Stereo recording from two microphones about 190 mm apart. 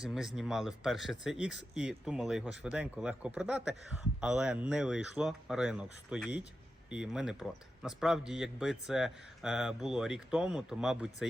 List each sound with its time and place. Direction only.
0.0 s speech: 5° right (ahead or behind)